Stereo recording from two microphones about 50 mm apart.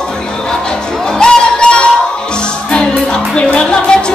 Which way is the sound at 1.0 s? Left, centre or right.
Centre.